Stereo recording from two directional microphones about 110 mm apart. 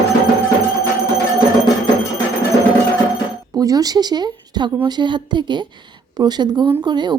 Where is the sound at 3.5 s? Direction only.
35° right (ahead or behind).